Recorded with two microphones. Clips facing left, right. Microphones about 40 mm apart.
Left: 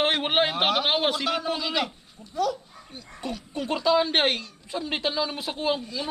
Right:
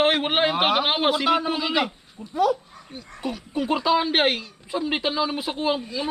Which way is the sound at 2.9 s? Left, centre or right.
Centre.